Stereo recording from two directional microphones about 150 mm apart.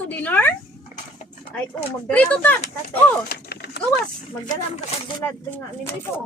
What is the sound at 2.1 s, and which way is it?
Speech, 10° left (ahead or behind).